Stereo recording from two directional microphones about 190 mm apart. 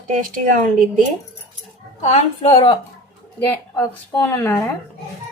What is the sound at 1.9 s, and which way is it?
Speech, 40° left (ahead or behind).